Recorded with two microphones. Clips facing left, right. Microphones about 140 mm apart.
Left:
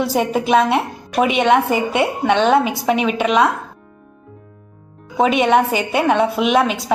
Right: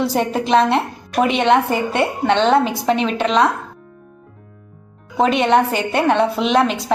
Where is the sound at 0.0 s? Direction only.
5° left (ahead or behind).